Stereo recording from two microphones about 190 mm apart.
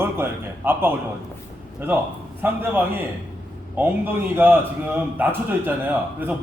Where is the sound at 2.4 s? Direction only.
10° right (ahead or behind).